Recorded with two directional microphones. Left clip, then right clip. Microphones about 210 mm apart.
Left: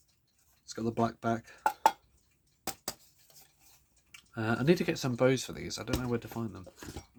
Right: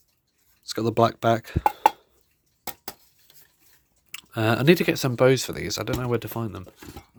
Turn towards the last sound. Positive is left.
turn(degrees=-45)  # may be behind; listen again after turning